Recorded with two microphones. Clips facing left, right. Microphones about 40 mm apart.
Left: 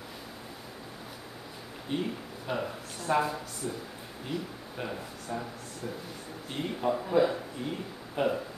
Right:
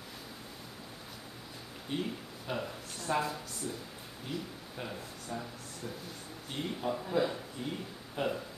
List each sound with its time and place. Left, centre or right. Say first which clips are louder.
1.9 s speech: left 4 dB; centre
6.5 s speech: left 5 dB; centre